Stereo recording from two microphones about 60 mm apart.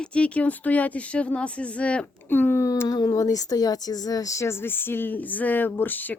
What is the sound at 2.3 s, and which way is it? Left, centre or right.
Speech, left.